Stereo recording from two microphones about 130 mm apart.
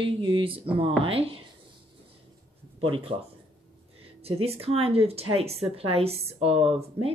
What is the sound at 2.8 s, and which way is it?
Speech, 45° right (ahead or behind).